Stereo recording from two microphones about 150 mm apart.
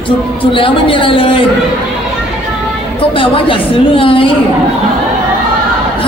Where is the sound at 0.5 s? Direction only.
35° left (ahead or behind).